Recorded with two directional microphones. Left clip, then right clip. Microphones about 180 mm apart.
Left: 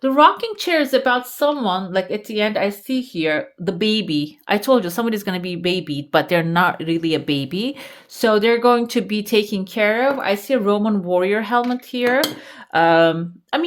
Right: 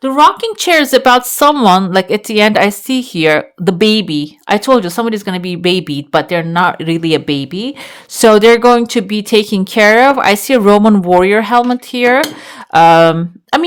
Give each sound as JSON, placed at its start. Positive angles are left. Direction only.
{"t": 0.0, "sound": "speech", "side_deg": -25}
{"t": 6.1, "sound": "speech", "side_deg": -10}
{"t": 6.7, "sound": "speech", "side_deg": -35}
{"t": 7.3, "sound": "speech", "side_deg": -15}
{"t": 8.2, "sound": "speech", "side_deg": -40}